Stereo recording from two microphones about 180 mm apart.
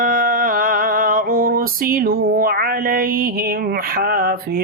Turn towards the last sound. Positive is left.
turn(degrees=-55)  # may be behind; listen again after turning